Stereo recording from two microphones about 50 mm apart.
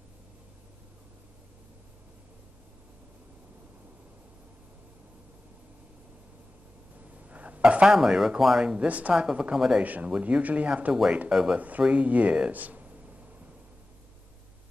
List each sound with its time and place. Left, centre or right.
7.2 s speech: right; by 8.7 s centre
8.7 s speech: right
9.1 s speech: centre
9.8 s speech: right
10.1 s speech: right
11.2 s speech: centre
11.5 s speech: right